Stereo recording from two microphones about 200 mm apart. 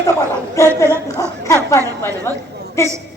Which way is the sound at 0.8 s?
15° left (ahead or behind).